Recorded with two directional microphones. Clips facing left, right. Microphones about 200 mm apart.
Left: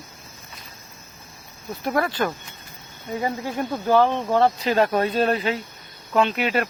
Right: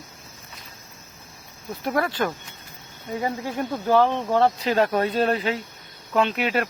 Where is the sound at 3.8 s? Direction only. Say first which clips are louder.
Left 1 dB; 5° left (ahead or behind).